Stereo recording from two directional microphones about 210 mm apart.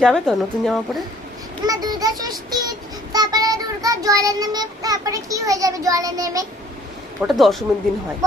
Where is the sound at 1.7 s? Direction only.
20° right (ahead or behind).